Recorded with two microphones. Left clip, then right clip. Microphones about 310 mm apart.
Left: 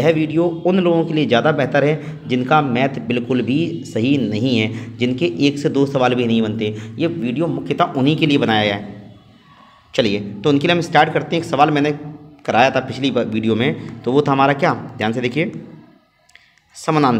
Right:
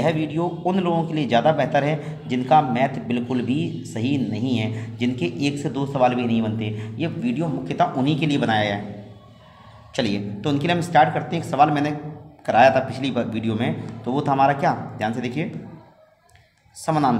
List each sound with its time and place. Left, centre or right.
0.0 s a man's voice: centre
9.9 s a man's voice: centre
16.8 s a man's voice: centre